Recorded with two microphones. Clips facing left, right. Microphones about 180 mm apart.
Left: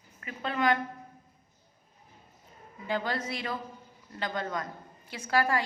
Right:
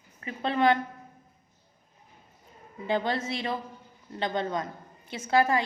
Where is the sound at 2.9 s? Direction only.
25° right (ahead or behind).